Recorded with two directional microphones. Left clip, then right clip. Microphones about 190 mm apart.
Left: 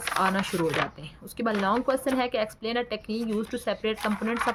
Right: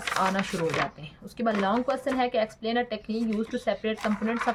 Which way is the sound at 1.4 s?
30° left (ahead or behind).